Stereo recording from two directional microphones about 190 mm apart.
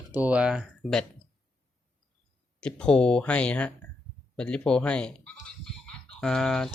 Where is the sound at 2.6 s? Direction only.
5° left (ahead or behind).